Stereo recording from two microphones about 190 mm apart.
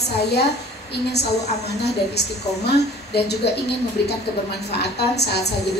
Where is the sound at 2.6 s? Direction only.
60° left (ahead or behind).